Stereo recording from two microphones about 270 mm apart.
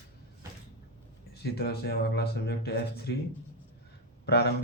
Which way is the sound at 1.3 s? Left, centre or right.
Left.